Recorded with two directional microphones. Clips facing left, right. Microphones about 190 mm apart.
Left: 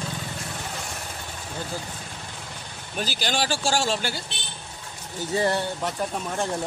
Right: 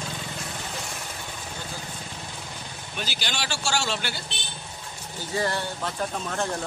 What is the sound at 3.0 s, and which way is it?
Speech, 40° left (ahead or behind).